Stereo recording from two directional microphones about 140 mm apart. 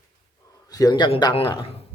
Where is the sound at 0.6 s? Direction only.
25° left (ahead or behind).